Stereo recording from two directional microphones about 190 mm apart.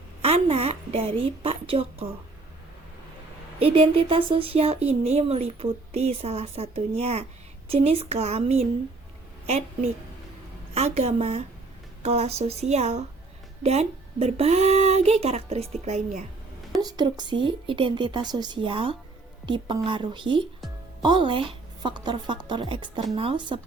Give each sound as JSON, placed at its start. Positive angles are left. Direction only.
{"t": 0.2, "sound": "a woman's voice", "side_deg": -30}
{"t": 3.6, "sound": "speech", "side_deg": -30}
{"t": 16.8, "sound": "speech", "side_deg": -20}